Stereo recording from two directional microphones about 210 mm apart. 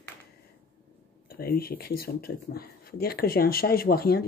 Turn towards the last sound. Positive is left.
turn(degrees=45)  # may be behind; listen again after turning